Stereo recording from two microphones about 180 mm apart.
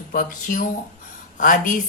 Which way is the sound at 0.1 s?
50° left (ahead or behind).